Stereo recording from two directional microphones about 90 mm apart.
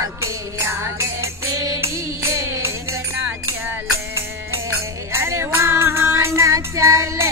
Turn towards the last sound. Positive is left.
turn(degrees=-35)  # may be behind; listen again after turning